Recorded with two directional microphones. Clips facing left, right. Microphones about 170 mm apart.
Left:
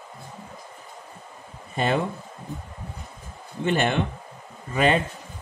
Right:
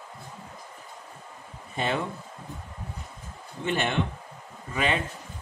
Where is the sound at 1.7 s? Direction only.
45° left (ahead or behind).